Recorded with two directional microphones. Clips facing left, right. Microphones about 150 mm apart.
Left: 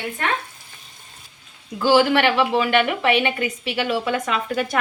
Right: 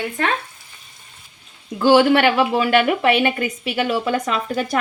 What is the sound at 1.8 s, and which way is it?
Speech, 45° right (ahead or behind).